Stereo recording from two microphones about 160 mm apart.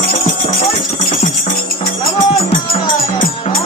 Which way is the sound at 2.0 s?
30° left (ahead or behind).